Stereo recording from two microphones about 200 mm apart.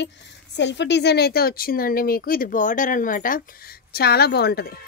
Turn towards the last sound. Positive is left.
turn(degrees=50)  # may be behind; listen again after turning